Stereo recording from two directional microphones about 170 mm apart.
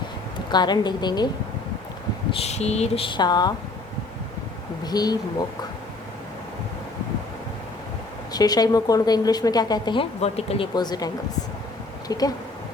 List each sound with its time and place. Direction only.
0.5 s a woman's voice: 25° left (ahead or behind)
2.3 s speech: 40° left (ahead or behind)
4.8 s a sound: 25° left (ahead or behind)
8.3 s a woman's voice: 25° left (ahead or behind)
10.8 s a woman's voice: 25° left (ahead or behind)